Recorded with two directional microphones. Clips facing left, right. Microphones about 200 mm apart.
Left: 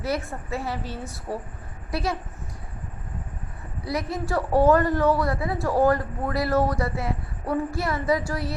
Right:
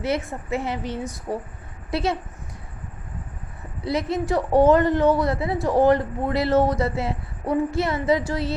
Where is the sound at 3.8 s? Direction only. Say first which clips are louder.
Right 4 dB; 25° right (ahead or behind).